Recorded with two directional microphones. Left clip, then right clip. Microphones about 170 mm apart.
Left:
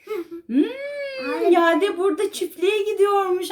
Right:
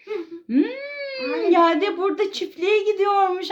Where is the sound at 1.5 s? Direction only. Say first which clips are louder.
Right 1 dB; 35° right (ahead or behind).